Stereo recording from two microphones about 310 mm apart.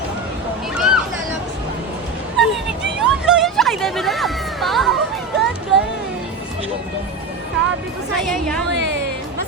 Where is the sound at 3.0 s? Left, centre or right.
Centre.